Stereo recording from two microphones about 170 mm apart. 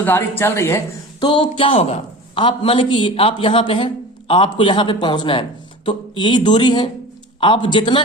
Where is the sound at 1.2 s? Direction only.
30° left (ahead or behind).